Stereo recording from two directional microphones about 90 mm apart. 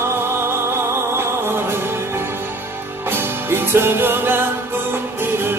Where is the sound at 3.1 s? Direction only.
25° right (ahead or behind).